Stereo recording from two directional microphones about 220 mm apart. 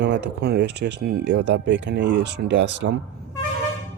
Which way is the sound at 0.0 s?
50° right (ahead or behind).